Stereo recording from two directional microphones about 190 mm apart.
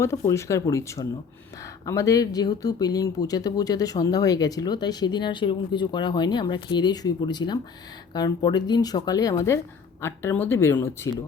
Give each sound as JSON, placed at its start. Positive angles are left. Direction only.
{"t": 0.0, "sound": "speech", "side_deg": 15}